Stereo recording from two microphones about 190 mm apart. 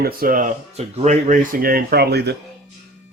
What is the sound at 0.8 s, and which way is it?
Speech, 35° right (ahead or behind).